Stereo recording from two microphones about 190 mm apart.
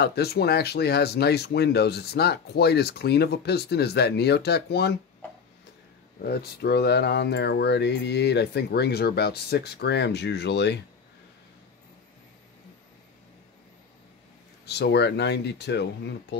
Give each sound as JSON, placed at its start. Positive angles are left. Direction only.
{"t": 0.0, "sound": "speech", "side_deg": 55}
{"t": 6.2, "sound": "speech", "side_deg": 55}
{"t": 14.7, "sound": "speech", "side_deg": 60}